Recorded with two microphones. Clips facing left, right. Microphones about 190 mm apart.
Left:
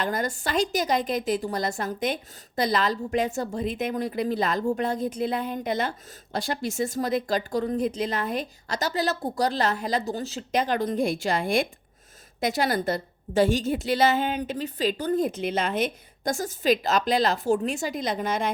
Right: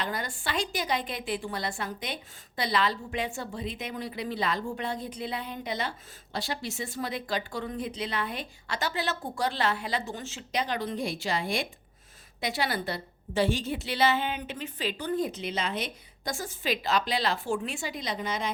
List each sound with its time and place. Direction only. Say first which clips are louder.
0.0 s a woman's voice: left 6 dB; 45° left (ahead or behind)